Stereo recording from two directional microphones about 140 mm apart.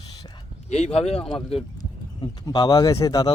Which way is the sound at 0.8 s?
5° left (ahead or behind).